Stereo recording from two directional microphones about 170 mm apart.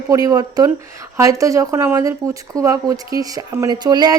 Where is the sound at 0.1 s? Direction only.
20° right (ahead or behind).